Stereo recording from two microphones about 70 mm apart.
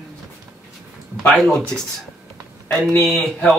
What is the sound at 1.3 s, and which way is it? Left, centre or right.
Speech, centre.